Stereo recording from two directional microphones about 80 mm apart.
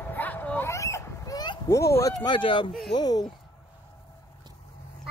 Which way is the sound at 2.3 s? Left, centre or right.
Left.